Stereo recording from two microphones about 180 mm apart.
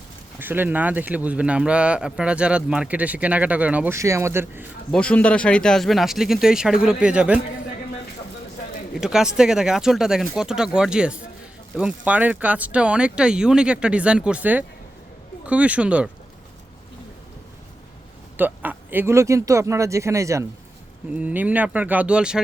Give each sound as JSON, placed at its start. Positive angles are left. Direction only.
{"t": 0.3, "sound": "speech", "side_deg": -10}
{"t": 4.9, "sound": "speech", "side_deg": 5}
{"t": 9.0, "sound": "speech", "side_deg": -5}
{"t": 18.3, "sound": "speech", "side_deg": -10}